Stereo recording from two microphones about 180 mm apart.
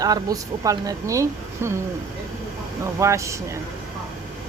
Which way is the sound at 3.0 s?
15° right (ahead or behind).